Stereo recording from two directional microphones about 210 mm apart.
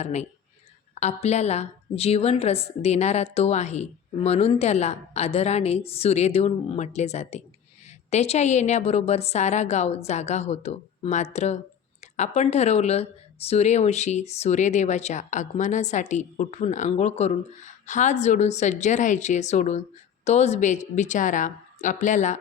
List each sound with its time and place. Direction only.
0.0 s speech: 30° left (ahead or behind)